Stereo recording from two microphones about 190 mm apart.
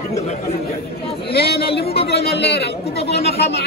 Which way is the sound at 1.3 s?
55° left (ahead or behind).